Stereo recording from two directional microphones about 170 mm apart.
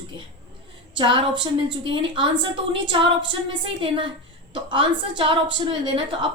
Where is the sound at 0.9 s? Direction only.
30° right (ahead or behind).